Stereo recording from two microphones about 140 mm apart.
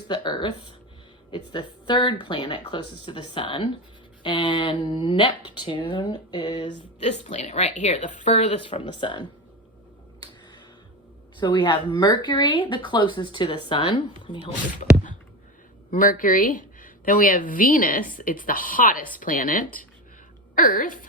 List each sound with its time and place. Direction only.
0.1 s speech: 35° left (ahead or behind)
7.0 s a woman's voice: 55° left (ahead or behind)
8.6 s speech: 35° left (ahead or behind)
11.3 s speech: 35° left (ahead or behind)
15.9 s a woman's voice: 75° left (ahead or behind)